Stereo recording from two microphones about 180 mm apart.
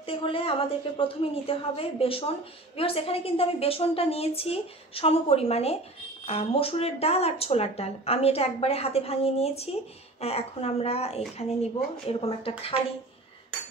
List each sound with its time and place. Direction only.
0.0 s a woman's voice: 30° left (ahead or behind)